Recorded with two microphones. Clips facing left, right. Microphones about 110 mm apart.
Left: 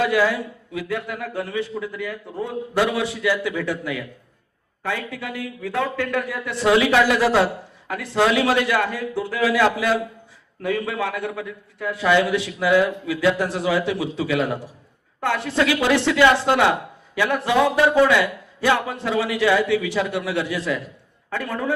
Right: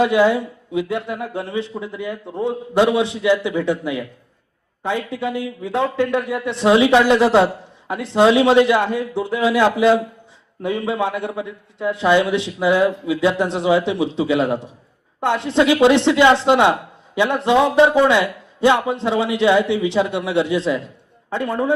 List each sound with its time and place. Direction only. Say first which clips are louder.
0.0 s a man's voice: right 5 dB; 20° right (ahead or behind)